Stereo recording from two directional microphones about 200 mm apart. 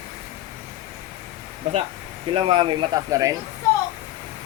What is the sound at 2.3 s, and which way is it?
Speech, 25° right (ahead or behind).